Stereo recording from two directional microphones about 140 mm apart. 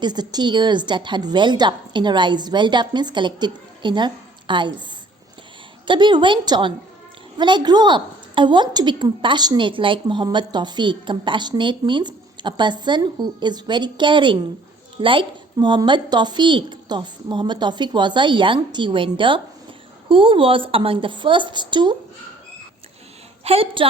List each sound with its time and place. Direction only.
0.0 s a woman's voice: 30° right (ahead or behind)
5.9 s a woman's voice: 35° right (ahead or behind)
23.4 s a woman's voice: 45° right (ahead or behind)